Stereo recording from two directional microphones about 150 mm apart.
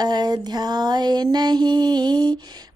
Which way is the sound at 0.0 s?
25° right (ahead or behind).